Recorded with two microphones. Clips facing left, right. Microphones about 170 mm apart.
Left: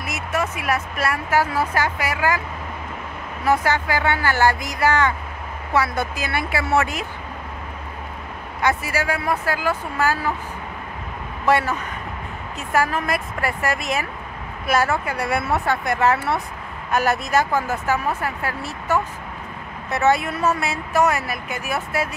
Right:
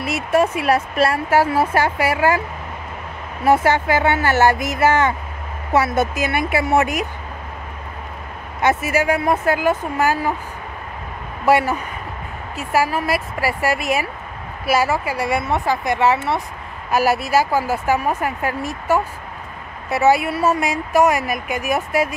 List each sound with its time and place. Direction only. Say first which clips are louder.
0.0 s speech: right 7 dB; 30° right (ahead or behind)
3.4 s speech: right 4 dB; 25° right (ahead or behind)
8.6 s speech: right 5 dB; 20° right (ahead or behind)
11.4 s a woman's voice: right 3 dB; 10° right (ahead or behind)